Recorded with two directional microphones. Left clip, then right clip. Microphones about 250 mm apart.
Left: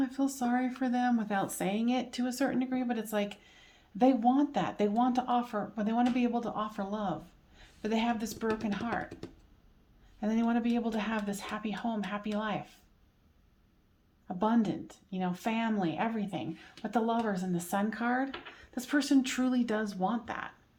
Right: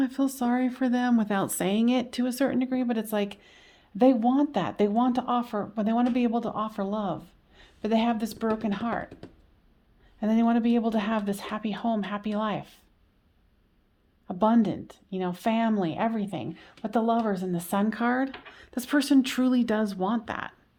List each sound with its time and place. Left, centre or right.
0.0 s speech: right
10.2 s speech: right
14.3 s speech: right